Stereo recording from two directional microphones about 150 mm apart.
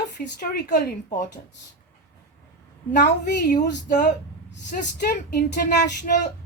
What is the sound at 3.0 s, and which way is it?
Speech, 60° left (ahead or behind).